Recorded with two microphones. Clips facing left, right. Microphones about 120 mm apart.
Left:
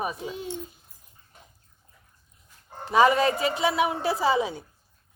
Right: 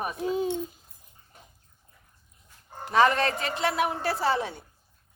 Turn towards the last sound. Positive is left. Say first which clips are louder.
# left 3 dB
turn(degrees=5)  # may be behind; listen again after turning